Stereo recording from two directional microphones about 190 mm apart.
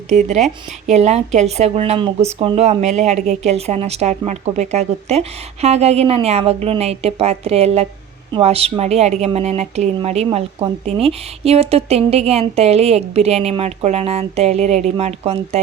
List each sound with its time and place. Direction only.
0.1 s a woman's voice: 40° right (ahead or behind)